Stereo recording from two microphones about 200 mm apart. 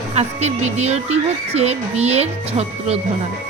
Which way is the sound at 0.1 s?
35° right (ahead or behind).